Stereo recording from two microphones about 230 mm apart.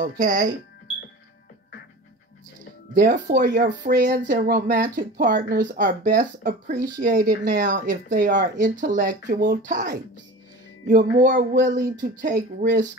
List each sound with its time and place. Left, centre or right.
0.0 s speech: right
2.9 s speech: right
11.2 s speech: right